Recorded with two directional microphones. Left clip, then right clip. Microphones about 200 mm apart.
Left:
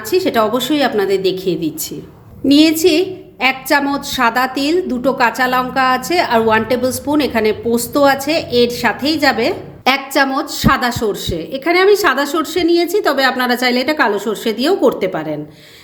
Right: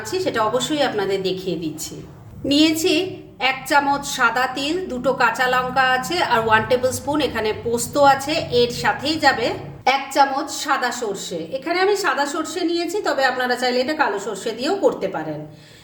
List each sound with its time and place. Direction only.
0.1 s a woman's voice: 35° left (ahead or behind)
9.8 s speech: 45° left (ahead or behind)